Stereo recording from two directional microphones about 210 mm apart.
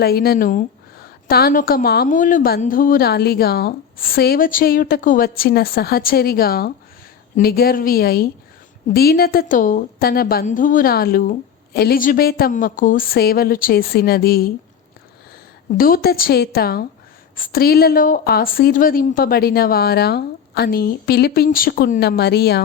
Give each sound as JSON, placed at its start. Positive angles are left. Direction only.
{"t": 0.0, "sound": "a woman's voice", "side_deg": 45}
{"t": 15.8, "sound": "a woman's voice", "side_deg": 45}